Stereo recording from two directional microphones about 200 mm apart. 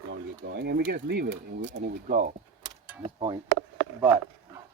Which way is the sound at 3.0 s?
25° right (ahead or behind).